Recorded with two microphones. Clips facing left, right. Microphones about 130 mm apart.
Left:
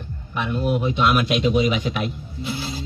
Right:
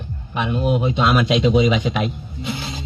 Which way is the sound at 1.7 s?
90° right.